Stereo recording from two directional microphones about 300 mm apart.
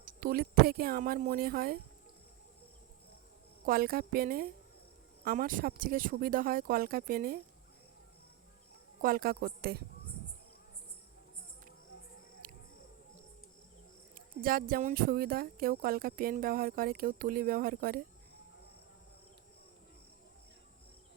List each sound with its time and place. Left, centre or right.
0.0 s speech: right
3.7 s speech: right
9.0 s a woman's voice: right
12.4 s insect: right
14.2 s speech: right